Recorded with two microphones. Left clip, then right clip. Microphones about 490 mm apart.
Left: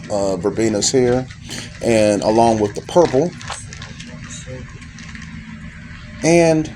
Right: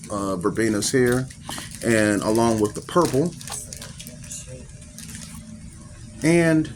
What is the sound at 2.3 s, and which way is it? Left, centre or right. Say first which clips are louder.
Speech: left 7 dB; centre.